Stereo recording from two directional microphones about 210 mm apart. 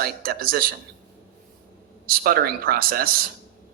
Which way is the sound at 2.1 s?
45° right (ahead or behind).